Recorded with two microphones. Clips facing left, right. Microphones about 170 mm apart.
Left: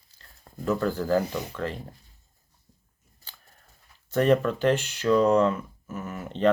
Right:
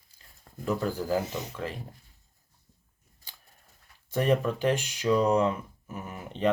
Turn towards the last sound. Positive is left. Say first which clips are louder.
# left 4 dB
turn(degrees=-15)  # may be behind; listen again after turning